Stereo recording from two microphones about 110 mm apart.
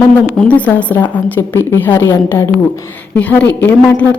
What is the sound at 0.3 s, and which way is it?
A woman's voice, 10° left (ahead or behind).